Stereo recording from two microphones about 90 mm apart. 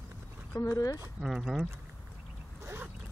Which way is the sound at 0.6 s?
40° left (ahead or behind).